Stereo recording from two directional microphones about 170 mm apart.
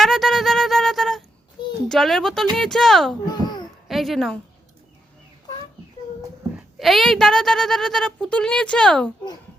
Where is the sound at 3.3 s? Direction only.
25° left (ahead or behind).